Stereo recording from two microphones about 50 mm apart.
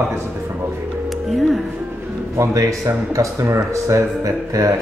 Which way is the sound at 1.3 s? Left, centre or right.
Centre.